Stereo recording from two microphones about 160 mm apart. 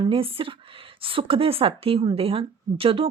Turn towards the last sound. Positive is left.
turn(degrees=-35)  # may be behind; listen again after turning